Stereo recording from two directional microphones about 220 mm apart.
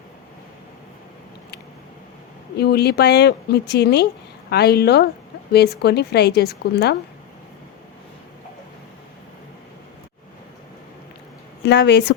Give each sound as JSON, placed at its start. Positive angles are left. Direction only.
{"t": 2.6, "sound": "a woman's voice", "side_deg": 45}
{"t": 11.6, "sound": "speech", "side_deg": 50}